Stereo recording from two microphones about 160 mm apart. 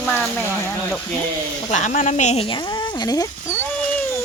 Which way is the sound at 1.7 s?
50° left (ahead or behind).